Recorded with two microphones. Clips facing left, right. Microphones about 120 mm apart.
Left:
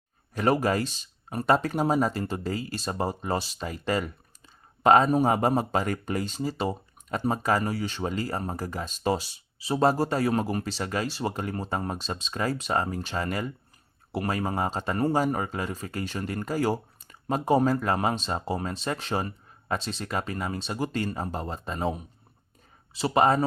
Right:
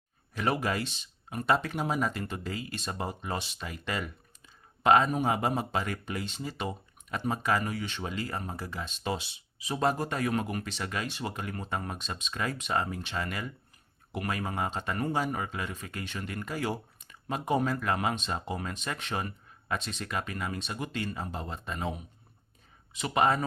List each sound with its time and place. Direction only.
0.3 s speech: 40° left (ahead or behind)